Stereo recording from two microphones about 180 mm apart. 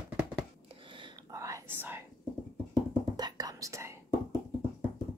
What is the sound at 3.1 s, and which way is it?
Whispering, 20° right (ahead or behind).